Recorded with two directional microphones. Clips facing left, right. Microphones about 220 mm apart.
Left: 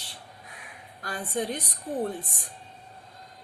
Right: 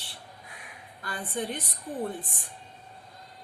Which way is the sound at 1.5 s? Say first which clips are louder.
Left 2 dB; 40° left (ahead or behind).